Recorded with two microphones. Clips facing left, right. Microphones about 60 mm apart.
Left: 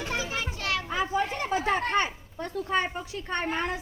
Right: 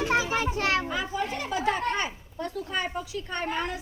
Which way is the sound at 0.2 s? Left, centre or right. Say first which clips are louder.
Right 6 dB; right.